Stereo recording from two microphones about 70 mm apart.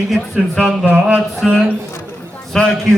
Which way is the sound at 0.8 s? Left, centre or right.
Centre.